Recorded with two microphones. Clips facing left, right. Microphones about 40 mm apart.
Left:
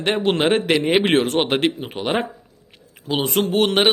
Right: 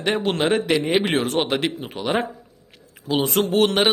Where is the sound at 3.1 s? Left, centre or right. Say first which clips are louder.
Even; centre.